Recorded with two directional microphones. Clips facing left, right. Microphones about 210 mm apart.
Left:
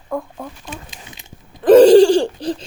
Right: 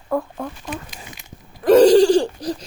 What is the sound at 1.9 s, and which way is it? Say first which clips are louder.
Laughter: left 4 dB; 30° left (ahead or behind).